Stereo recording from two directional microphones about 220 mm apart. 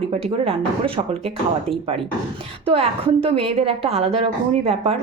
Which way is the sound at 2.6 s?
25° right (ahead or behind).